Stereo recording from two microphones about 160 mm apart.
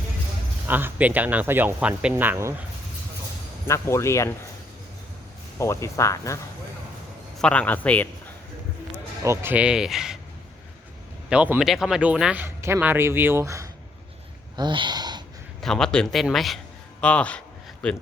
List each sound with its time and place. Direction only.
0.7 s speech: 10° right (ahead or behind)
3.7 s a man's voice: 15° left (ahead or behind)
5.5 s speech: 20° left (ahead or behind)
7.3 s a man's voice: 5° left (ahead or behind)
9.2 s speech: 15° right (ahead or behind)
11.3 s speech: 10° right (ahead or behind)
14.5 s speech: 30° right (ahead or behind)
15.6 s a man's voice: 5° left (ahead or behind)